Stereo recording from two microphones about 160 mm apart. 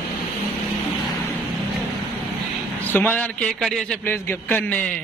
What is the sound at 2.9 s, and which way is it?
A man's voice, 10° left (ahead or behind).